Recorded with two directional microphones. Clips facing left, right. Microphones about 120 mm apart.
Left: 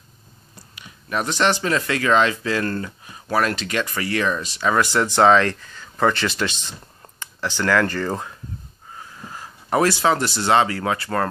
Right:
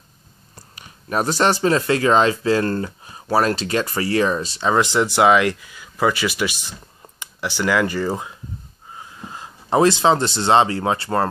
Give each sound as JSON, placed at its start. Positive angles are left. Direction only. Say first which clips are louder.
{"t": 0.7, "sound": "speech", "louder": "right 3 dB", "side_deg": -40}